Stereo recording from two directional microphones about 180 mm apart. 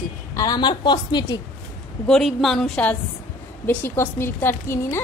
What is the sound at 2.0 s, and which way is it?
A woman's voice, centre (ahead or behind).